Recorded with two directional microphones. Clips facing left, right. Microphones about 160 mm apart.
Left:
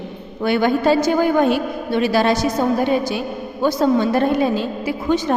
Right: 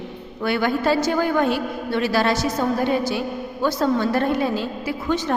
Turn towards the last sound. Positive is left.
turn(degrees=15)  # may be behind; listen again after turning